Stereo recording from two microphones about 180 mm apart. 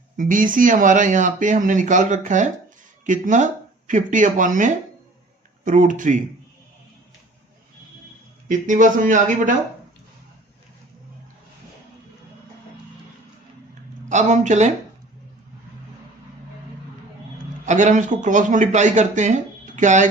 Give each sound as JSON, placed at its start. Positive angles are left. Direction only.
{"t": 0.2, "sound": "speech", "side_deg": -50}
{"t": 8.4, "sound": "speech", "side_deg": -45}
{"t": 14.1, "sound": "speech", "side_deg": -40}
{"t": 17.7, "sound": "speech", "side_deg": -40}